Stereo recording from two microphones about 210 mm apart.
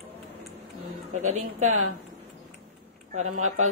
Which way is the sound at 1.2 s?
35° right (ahead or behind).